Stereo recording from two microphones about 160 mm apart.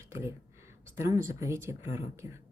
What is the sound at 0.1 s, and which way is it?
Speech, 15° right (ahead or behind).